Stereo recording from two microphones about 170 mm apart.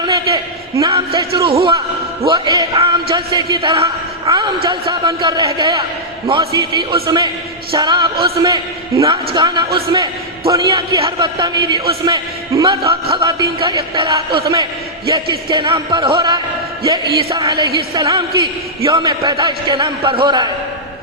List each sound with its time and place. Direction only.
0.8 s a man's voice: 30° right (ahead or behind)